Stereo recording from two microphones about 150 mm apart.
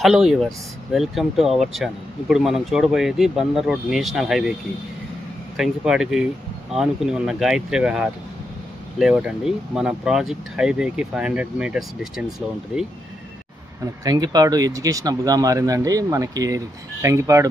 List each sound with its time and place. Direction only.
0.0 s speech: centre (ahead or behind)
5.6 s speech: 5° right (ahead or behind)
14.0 s speech: 25° right (ahead or behind)